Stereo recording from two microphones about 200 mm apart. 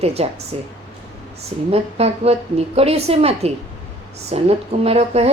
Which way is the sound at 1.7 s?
30° right (ahead or behind).